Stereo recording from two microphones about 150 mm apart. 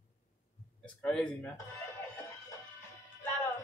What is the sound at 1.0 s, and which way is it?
Speech, 5° left (ahead or behind).